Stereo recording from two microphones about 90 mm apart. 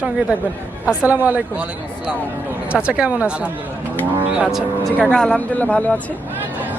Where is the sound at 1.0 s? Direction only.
20° right (ahead or behind).